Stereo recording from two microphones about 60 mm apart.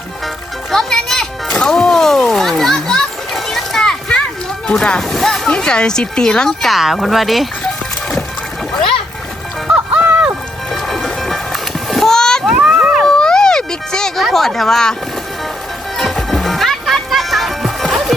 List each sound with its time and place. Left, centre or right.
0.7 s music: centre
4.7 s speech: centre
9.7 s music: right
10.7 s music: centre
12.5 s a sound: centre
13.1 s a sound: centre
14.3 s speech: centre
16.0 s music: centre